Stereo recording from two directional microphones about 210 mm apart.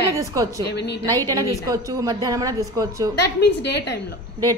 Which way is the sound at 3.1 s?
55° left (ahead or behind).